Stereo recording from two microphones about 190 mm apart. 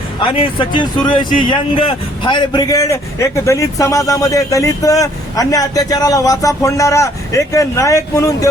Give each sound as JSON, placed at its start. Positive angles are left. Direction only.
{"t": 0.2, "sound": "a man's voice", "side_deg": 30}